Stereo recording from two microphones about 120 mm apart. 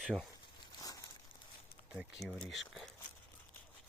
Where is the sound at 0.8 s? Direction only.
30° left (ahead or behind).